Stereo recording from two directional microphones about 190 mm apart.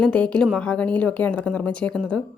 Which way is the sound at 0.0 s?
5° left (ahead or behind).